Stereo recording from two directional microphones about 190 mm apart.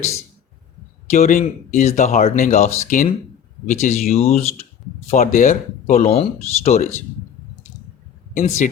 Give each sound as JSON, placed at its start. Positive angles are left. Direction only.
{"t": 1.1, "sound": "speech", "side_deg": 40}
{"t": 8.3, "sound": "speech", "side_deg": 40}